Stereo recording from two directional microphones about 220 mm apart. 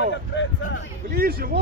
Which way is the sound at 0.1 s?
55° left (ahead or behind).